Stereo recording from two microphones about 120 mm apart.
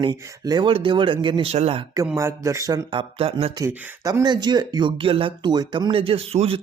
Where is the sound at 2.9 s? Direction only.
50° right (ahead or behind).